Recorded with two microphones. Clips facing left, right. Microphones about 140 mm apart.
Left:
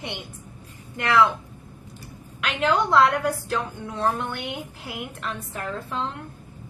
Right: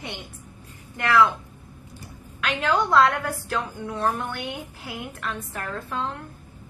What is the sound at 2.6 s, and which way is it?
Speech, 25° left (ahead or behind).